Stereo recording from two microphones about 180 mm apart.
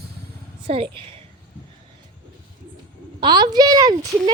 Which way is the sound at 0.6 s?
30° right (ahead or behind).